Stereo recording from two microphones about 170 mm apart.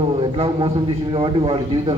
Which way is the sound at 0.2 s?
30° right (ahead or behind).